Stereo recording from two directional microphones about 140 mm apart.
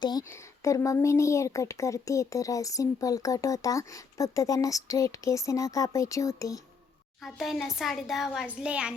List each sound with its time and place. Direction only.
0.0 s speech: 25° left (ahead or behind)
7.2 s speech: centre (ahead or behind)